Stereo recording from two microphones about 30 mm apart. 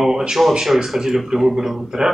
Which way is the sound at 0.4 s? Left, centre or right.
Centre.